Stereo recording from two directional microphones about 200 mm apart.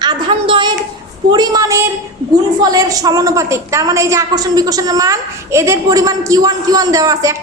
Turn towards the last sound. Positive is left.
turn(degrees=-15)  # may be behind; listen again after turning